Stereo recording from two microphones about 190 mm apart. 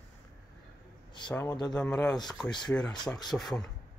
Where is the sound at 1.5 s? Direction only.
20° left (ahead or behind).